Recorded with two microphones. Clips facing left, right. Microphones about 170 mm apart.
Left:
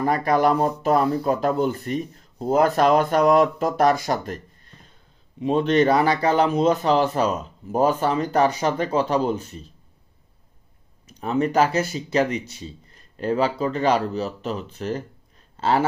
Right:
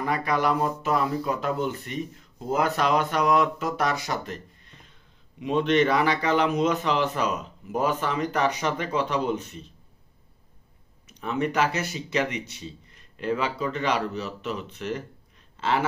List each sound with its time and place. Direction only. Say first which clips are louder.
0.0 s a man's voice: left 6 dB; 45° left (ahead or behind)
2.7 s a man's voice: left 6 dB; 50° left (ahead or behind)
11.1 s a man's voice: left 5 dB; 35° left (ahead or behind)
15.5 s a sound: left 4 dB; 40° left (ahead or behind)